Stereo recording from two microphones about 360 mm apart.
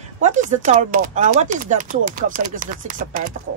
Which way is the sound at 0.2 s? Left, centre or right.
Centre.